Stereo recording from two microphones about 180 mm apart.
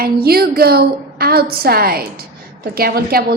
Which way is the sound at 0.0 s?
60° right (ahead or behind).